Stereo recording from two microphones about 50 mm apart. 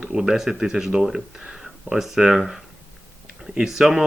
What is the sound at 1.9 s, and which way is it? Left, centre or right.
Speech, centre.